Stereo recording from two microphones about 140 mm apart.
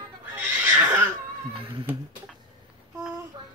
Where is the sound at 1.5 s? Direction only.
40° right (ahead or behind).